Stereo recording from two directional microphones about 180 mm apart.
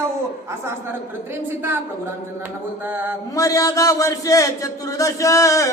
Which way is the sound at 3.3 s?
20° left (ahead or behind).